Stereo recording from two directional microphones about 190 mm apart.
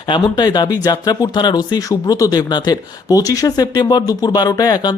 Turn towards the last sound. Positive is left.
turn(degrees=20)  # may be behind; listen again after turning